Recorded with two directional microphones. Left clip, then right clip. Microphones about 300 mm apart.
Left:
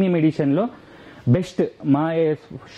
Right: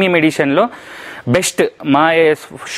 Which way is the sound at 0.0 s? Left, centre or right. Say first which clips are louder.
Right 8 dB; centre.